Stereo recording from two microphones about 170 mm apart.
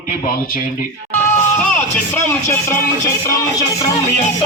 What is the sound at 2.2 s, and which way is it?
Speech, 15° left (ahead or behind).